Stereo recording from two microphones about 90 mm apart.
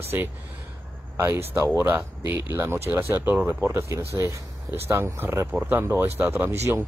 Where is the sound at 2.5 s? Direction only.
25° right (ahead or behind).